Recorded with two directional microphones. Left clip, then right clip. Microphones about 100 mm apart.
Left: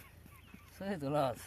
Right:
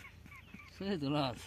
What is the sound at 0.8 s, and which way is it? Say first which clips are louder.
Speech: left 2 dB; 20° left (ahead or behind).